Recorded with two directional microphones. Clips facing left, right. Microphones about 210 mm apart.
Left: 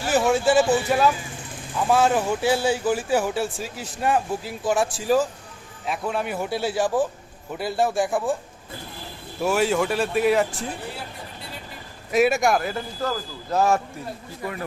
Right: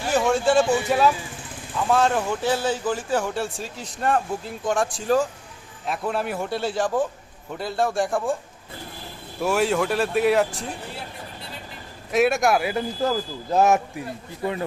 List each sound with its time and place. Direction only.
0.0 s speech: 5° left (ahead or behind)
9.4 s speech: centre (ahead or behind)
12.1 s speech: centre (ahead or behind)
13.6 s a man's voice: 20° right (ahead or behind)